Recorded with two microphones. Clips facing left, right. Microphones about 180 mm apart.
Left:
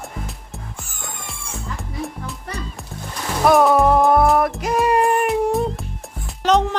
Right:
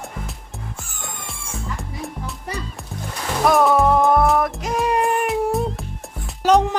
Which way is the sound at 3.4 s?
Centre (ahead or behind).